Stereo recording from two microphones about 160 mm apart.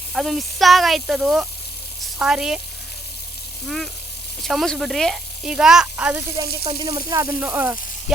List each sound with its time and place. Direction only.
0.1 s speech: centre (ahead or behind)
4.4 s speech: centre (ahead or behind)
6.3 s speech: 25° right (ahead or behind)